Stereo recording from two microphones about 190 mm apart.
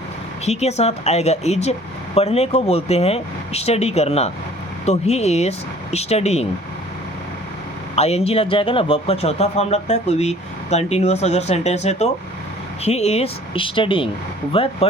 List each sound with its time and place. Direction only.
0.4 s a man's voice: 35° left (ahead or behind)
7.9 s a man's voice: 35° left (ahead or behind)